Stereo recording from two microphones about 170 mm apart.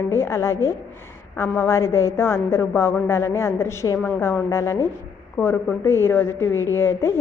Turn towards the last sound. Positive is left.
turn(degrees=15)  # may be behind; listen again after turning